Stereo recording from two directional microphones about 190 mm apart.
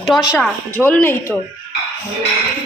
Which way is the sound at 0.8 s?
10° left (ahead or behind).